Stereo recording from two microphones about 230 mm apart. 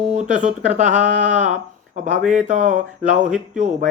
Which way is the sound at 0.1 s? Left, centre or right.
Right.